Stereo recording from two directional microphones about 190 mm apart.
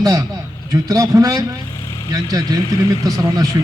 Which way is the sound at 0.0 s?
20° right (ahead or behind).